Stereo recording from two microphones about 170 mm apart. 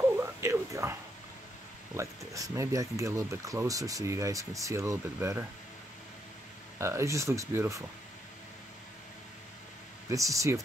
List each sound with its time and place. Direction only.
0.2 s a sound: 15° right (ahead or behind)
2.0 s speech: 20° right (ahead or behind)
6.8 s speech: 15° right (ahead or behind)
10.0 s speech: 20° right (ahead or behind)